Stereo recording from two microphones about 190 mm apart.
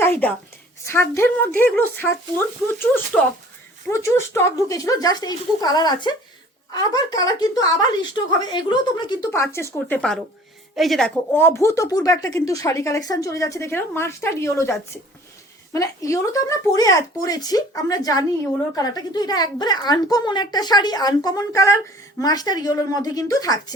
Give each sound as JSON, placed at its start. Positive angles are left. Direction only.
{"t": 0.0, "sound": "a woman's voice", "side_deg": 10}